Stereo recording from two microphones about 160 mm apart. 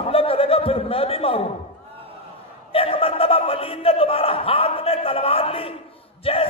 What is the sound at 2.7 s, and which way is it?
Speech, 35° left (ahead or behind).